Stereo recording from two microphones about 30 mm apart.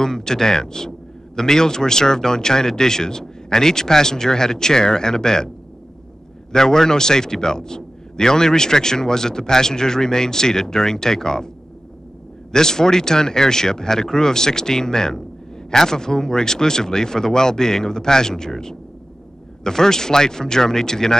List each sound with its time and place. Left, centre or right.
0.0 s a man's voice: centre
6.5 s a man's voice: centre
12.5 s a man's voice: centre